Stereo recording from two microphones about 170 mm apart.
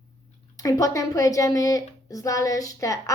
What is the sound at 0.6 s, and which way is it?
A woman's voice, 20° left (ahead or behind).